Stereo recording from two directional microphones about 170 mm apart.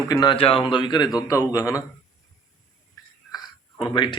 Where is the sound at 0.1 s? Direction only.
25° left (ahead or behind).